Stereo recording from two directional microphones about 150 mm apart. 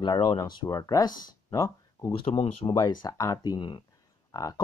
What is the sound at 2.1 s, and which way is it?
Speech, 40° left (ahead or behind).